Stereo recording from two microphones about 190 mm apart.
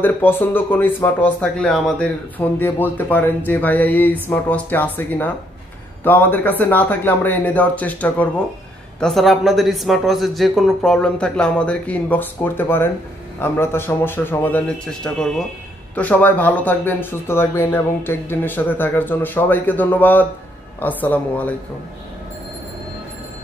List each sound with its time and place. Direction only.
0.0 s speech: 10° left (ahead or behind)